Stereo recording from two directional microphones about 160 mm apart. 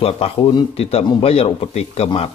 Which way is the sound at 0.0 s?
35° left (ahead or behind).